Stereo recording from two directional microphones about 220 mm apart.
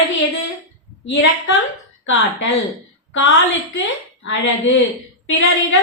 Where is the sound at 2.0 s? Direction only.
60° left (ahead or behind).